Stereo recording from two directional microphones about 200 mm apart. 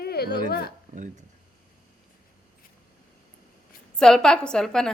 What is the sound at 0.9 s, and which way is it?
Speech, 40° right (ahead or behind).